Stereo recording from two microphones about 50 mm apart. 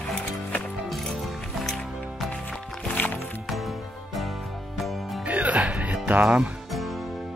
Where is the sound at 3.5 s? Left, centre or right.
Centre.